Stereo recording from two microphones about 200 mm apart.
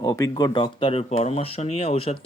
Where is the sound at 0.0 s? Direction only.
20° left (ahead or behind).